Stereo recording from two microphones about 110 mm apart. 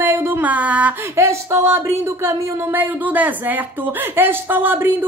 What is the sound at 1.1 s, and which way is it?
Speech, 25° right (ahead or behind).